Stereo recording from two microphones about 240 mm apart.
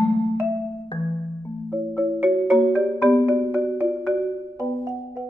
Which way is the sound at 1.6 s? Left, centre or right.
Centre.